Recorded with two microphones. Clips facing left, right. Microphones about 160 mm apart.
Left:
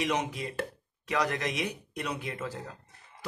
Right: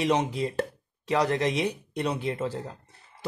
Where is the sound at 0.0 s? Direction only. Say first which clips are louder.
Right 6 dB; 30° right (ahead or behind).